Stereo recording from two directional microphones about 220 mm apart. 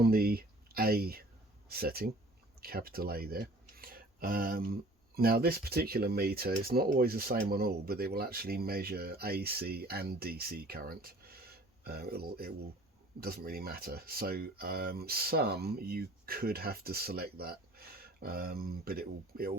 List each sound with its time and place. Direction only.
0.0 s speech: 45° right (ahead or behind)